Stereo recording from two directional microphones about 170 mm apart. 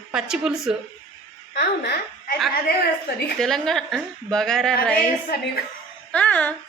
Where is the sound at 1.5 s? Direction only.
70° left (ahead or behind).